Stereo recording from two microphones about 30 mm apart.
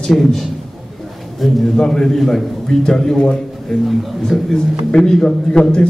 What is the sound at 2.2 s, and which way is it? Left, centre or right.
Speech, centre.